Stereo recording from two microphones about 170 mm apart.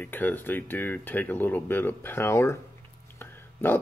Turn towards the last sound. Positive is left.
turn(degrees=10)  # may be behind; listen again after turning